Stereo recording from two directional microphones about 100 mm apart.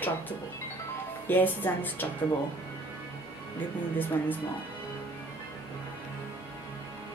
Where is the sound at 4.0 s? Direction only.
20° left (ahead or behind).